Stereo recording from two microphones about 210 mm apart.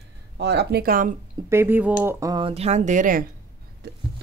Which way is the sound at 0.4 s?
55° right (ahead or behind).